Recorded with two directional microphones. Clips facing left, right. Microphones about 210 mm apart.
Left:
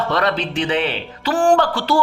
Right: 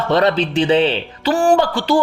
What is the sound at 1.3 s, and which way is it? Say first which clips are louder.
Speech: even; 10° right (ahead or behind).